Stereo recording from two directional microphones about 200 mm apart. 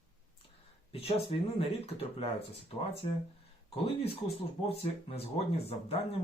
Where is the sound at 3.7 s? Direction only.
30° left (ahead or behind).